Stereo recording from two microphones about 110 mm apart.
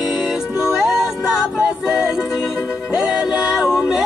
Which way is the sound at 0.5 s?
5° right (ahead or behind).